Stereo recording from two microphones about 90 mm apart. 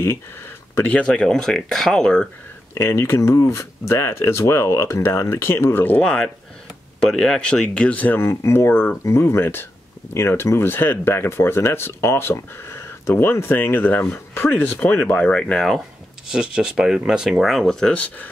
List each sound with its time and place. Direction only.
0.8 s speech: 15° left (ahead or behind)
2.7 s speech: 25° left (ahead or behind)
5.9 s speech: 10° left (ahead or behind)
16.3 s speech: 10° right (ahead or behind); by 18.3 s 15° left (ahead or behind)